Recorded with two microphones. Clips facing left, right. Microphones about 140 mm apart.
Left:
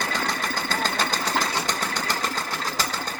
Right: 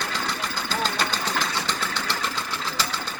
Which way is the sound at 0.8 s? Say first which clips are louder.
Left 1 dB; 45° left (ahead or behind).